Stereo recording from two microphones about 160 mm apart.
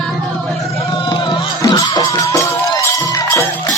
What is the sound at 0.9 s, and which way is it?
Music, 30° left (ahead or behind).